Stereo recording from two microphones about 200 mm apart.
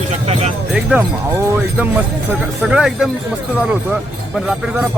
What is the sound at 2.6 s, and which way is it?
Speech, 5° right (ahead or behind).